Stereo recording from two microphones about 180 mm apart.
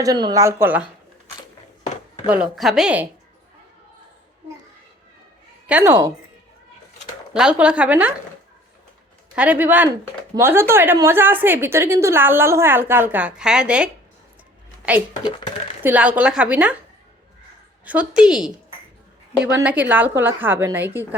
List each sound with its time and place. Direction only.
0.0 s a woman's voice: 20° right (ahead or behind)
2.3 s a woman's voice: 5° right (ahead or behind)
5.6 s a woman's voice: 10° right (ahead or behind)
7.3 s a woman's voice: 5° right (ahead or behind)
9.3 s a woman's voice: 10° right (ahead or behind)
15.8 s a woman's voice: 10° right (ahead or behind)
17.8 s a woman's voice: 5° right (ahead or behind)